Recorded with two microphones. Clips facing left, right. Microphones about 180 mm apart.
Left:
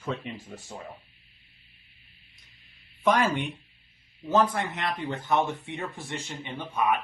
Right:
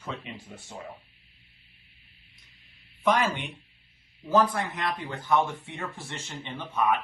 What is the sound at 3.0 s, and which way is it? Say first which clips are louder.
Speech: left 1 dB; 45° left (ahead or behind).